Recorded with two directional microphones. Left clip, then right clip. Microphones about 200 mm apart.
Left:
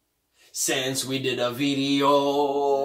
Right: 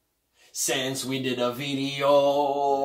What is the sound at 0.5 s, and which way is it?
Speech, 15° left (ahead or behind).